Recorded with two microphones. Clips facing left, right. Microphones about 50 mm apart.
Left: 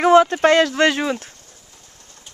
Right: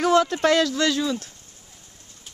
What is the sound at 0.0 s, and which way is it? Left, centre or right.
Speech, left.